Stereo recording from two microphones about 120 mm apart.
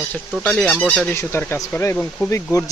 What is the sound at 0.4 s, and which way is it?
Speech, 5° left (ahead or behind).